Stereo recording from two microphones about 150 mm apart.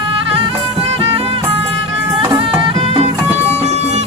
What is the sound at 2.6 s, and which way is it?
Music, 35° right (ahead or behind).